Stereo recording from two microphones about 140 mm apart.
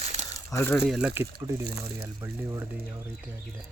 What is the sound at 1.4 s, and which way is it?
Speech, 20° right (ahead or behind).